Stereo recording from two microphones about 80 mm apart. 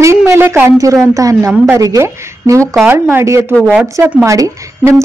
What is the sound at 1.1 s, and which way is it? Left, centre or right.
Speech, right.